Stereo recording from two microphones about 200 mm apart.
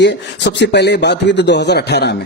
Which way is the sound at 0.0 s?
60° left (ahead or behind).